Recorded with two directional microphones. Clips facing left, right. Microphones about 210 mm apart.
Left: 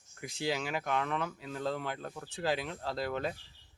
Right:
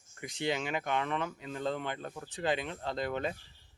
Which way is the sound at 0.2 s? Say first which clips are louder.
Right 1 dB; 5° left (ahead or behind).